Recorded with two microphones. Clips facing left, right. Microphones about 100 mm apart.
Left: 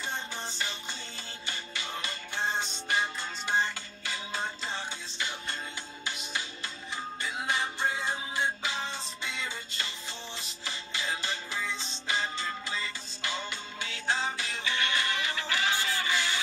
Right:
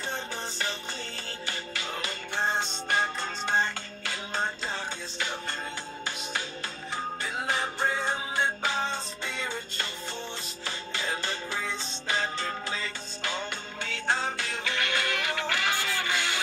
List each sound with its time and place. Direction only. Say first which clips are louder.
2.3 s music: right 3 dB; 55° right (ahead or behind)
7.3 s music: right 1 dB; 45° right (ahead or behind)
11.0 s music: right 1 dB; 50° right (ahead or behind)
14.0 s music: right 2 dB; 55° right (ahead or behind)